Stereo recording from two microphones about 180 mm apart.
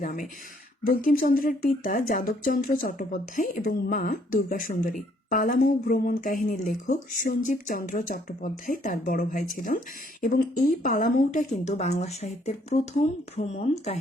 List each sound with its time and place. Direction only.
0.0 s a woman's voice: 50° left (ahead or behind)